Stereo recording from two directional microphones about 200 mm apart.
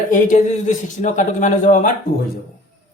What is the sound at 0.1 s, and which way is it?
Speech, 40° left (ahead or behind).